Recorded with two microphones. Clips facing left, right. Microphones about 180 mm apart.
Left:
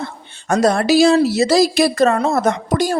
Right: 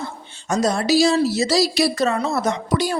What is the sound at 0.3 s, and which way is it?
Speech, 60° left (ahead or behind).